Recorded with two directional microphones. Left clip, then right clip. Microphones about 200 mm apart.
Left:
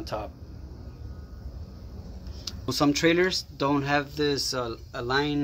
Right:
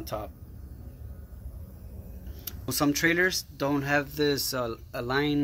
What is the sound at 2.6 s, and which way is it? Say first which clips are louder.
Speech: left 2 dB; 5° left (ahead or behind).